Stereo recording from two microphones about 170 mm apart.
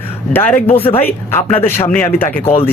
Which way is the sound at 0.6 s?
35° left (ahead or behind).